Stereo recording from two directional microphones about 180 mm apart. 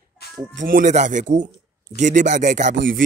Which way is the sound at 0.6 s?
50° right (ahead or behind).